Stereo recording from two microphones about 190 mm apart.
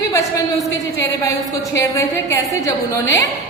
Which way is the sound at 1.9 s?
15° left (ahead or behind).